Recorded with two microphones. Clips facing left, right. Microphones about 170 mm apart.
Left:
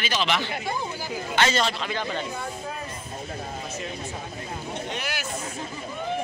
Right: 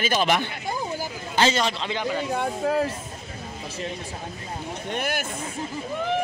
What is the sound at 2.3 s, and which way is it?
Speech, 75° right (ahead or behind).